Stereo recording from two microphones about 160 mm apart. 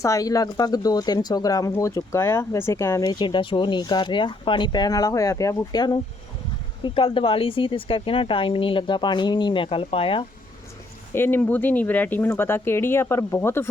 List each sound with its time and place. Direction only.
0.0 s speech: 20° left (ahead or behind)
11.1 s speech: 15° left (ahead or behind)